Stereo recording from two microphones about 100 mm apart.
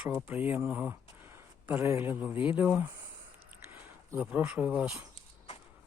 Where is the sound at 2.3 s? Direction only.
65° left (ahead or behind).